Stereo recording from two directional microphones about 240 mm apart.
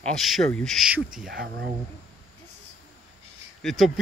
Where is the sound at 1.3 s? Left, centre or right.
Right.